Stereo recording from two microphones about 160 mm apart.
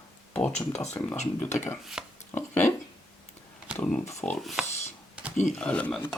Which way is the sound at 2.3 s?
15° left (ahead or behind).